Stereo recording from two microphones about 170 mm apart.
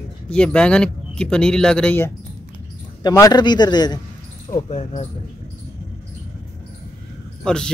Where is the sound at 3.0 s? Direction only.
20° left (ahead or behind).